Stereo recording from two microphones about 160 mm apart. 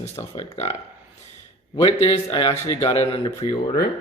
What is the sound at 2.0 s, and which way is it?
Speech, 30° left (ahead or behind).